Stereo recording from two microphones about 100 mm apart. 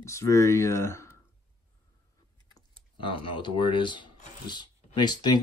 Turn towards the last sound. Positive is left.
turn(degrees=45)  # may be behind; listen again after turning